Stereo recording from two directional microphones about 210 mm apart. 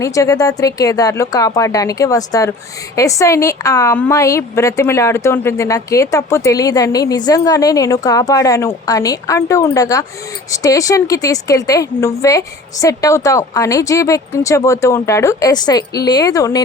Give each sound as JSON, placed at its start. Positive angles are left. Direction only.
{"t": 0.0, "sound": "a woman's voice", "side_deg": 15}